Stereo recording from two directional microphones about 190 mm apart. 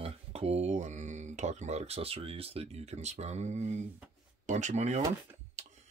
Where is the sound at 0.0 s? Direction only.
30° right (ahead or behind).